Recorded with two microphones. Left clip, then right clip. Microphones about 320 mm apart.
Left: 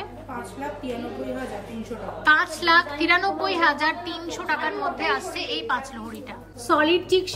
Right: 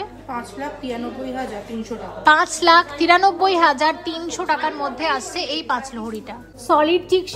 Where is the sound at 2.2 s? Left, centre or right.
Centre.